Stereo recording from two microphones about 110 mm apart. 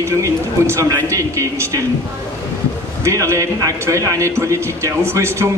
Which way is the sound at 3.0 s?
30° right (ahead or behind).